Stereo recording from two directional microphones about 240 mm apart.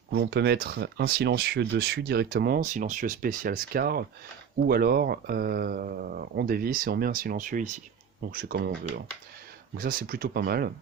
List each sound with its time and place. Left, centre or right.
0.1 s speech: right